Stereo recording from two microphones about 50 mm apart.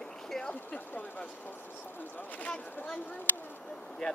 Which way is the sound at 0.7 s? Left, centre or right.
Left.